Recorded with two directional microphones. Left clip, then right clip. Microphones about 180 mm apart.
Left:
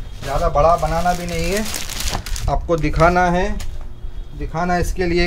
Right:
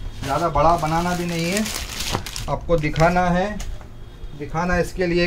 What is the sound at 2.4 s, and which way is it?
Speech, 40° left (ahead or behind).